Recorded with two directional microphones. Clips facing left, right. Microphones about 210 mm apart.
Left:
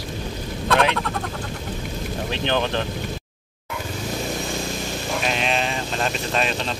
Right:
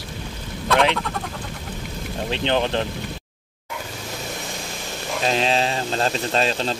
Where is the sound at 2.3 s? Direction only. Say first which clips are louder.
Right 2 dB; 20° right (ahead or behind).